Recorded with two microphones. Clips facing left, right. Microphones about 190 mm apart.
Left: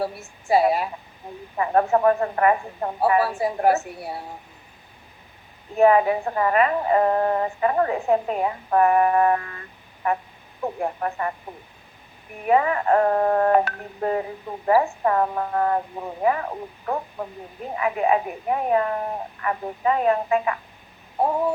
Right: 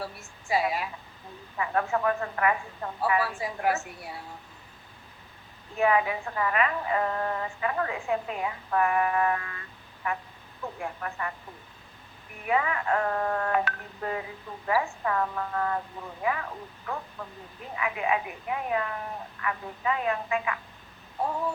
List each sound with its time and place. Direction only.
0.4 s a woman's voice: 40° left (ahead or behind)
5.7 s a woman's voice: 40° left (ahead or behind)
12.5 s a woman's voice: 40° left (ahead or behind)